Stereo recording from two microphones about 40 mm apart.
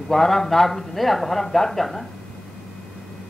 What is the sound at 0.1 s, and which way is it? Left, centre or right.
A man's voice, centre.